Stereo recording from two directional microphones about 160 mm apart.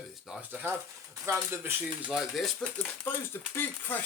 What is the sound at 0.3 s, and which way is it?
Speech, centre (ahead or behind).